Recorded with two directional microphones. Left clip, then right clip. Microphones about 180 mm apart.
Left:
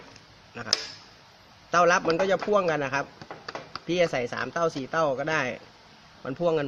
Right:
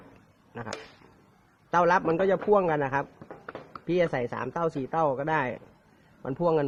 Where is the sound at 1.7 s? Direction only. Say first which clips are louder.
Left 2 dB; 40° right (ahead or behind).